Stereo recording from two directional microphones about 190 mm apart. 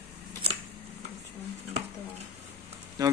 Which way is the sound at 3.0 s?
20° right (ahead or behind).